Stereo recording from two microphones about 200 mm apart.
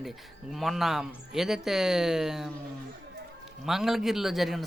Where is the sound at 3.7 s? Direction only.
Centre (ahead or behind).